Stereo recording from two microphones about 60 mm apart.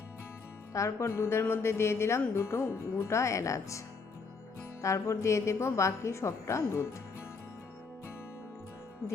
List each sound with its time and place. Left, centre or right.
0.7 s a woman's voice: left